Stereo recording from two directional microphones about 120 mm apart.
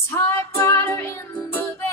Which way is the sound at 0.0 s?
20° left (ahead or behind).